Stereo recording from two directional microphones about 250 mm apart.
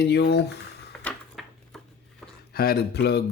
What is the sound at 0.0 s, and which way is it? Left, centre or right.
Speech, left.